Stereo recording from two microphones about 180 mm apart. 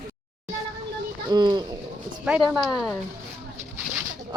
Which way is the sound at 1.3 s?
25° right (ahead or behind).